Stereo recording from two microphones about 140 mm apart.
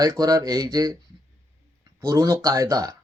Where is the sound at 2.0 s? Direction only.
25° right (ahead or behind).